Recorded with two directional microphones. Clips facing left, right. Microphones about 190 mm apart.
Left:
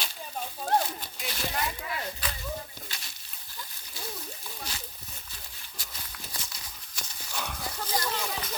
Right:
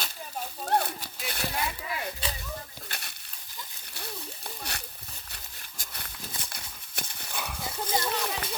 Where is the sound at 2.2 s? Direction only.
30° right (ahead or behind).